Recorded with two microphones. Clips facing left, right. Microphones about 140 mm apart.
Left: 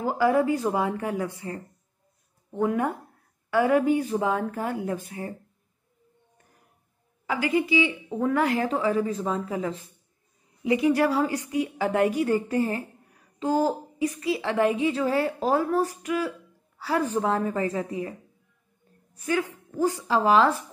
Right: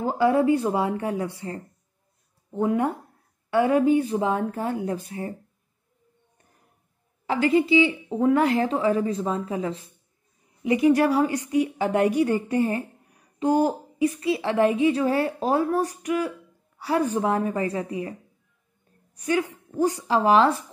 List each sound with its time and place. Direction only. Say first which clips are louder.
0.0 s a woman's voice: right 2 dB; 25° right (ahead or behind)
7.2 s a woman's voice: right 4 dB; 30° right (ahead or behind)
19.2 s a woman's voice: right 2 dB; 20° right (ahead or behind)